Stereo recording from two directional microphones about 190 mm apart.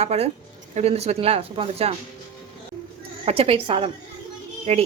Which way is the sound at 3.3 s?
30° right (ahead or behind).